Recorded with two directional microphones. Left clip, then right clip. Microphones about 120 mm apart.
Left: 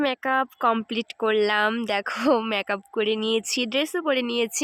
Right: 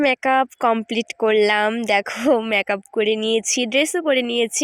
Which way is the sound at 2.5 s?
25° right (ahead or behind).